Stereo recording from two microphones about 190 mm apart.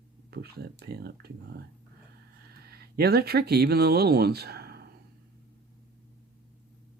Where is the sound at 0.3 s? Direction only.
55° right (ahead or behind).